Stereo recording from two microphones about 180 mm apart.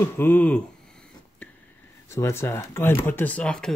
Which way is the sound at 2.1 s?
15° left (ahead or behind).